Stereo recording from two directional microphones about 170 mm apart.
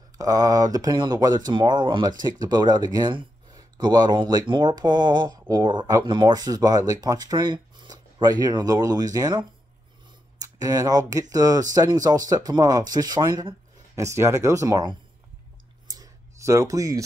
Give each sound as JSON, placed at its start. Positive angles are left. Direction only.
{"t": 0.2, "sound": "speech", "side_deg": -20}
{"t": 15.9, "sound": "clicking", "side_deg": -20}